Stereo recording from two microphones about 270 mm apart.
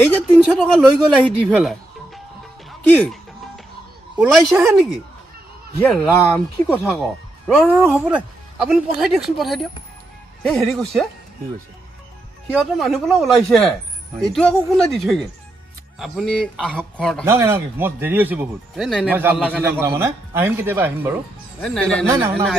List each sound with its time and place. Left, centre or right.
0.1 s speech: centre
1.5 s chicken: centre
4.2 s speech: centre
12.5 s speech: centre
17.2 s speech: centre
21.5 s speech: centre
22.0 s speech: centre